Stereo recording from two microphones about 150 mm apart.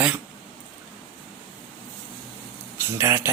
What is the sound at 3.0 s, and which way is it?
Speech, 15° right (ahead or behind).